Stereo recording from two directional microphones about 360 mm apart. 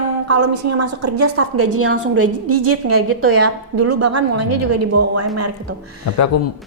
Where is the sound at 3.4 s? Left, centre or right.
Right.